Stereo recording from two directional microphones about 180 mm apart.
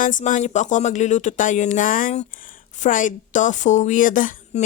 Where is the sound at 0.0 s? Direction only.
45° left (ahead or behind).